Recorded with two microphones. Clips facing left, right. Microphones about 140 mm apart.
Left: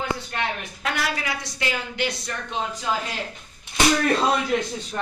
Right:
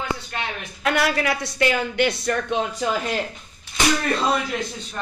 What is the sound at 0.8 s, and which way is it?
Speech, 60° right (ahead or behind).